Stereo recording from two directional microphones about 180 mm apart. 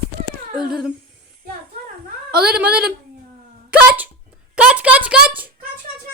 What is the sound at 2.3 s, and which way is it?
Speech, 60° right (ahead or behind).